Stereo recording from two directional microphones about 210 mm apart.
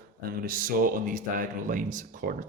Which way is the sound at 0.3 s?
40° right (ahead or behind).